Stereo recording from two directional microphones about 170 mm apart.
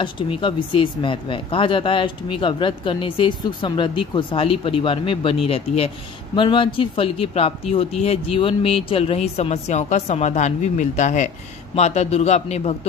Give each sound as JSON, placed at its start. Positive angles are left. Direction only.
{"t": 0.0, "sound": "a man's voice", "side_deg": 30}